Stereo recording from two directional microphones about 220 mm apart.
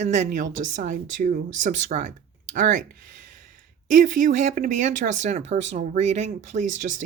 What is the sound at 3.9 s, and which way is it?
Speech, 35° right (ahead or behind).